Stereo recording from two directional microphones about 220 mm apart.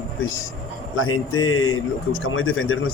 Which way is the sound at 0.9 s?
65° left (ahead or behind).